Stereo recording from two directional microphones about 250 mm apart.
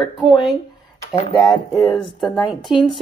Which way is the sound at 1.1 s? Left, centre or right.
Centre.